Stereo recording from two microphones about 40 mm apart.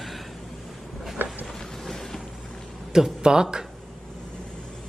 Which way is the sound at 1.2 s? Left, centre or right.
Right.